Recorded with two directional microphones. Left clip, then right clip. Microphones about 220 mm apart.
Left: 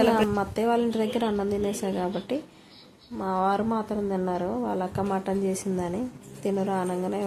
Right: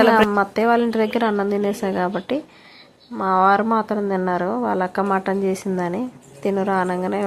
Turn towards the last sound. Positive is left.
turn(degrees=-15)  # may be behind; listen again after turning